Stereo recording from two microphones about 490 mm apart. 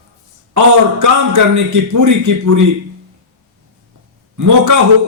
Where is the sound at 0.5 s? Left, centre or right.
Right.